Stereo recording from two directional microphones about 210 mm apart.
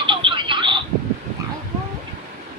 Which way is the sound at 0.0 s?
25° right (ahead or behind).